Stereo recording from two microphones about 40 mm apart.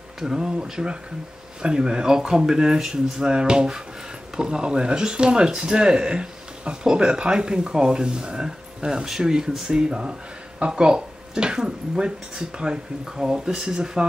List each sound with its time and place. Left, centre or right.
0.2 s speech: centre